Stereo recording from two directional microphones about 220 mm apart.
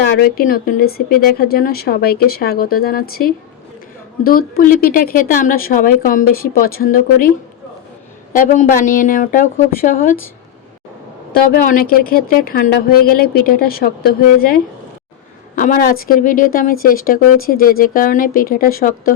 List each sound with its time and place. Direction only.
0.2 s a woman's voice: 40° left (ahead or behind)
8.3 s speech: 35° left (ahead or behind)
11.3 s a woman's voice: 40° left (ahead or behind)